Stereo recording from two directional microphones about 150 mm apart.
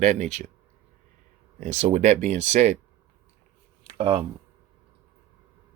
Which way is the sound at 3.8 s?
40° right (ahead or behind).